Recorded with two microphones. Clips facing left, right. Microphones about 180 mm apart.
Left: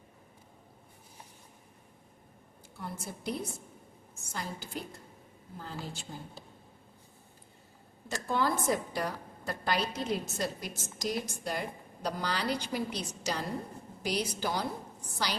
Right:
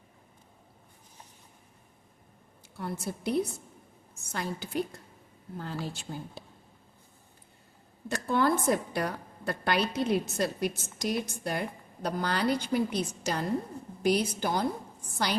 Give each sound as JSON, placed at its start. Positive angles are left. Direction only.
{"t": 2.7, "sound": "a woman's voice", "side_deg": -65}
{"t": 8.0, "sound": "a woman's voice", "side_deg": -60}